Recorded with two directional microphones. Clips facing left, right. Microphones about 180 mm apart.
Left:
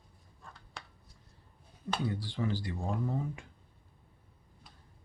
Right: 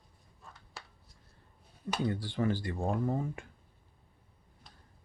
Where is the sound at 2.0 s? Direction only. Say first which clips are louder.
Right 5 dB; 55° right (ahead or behind).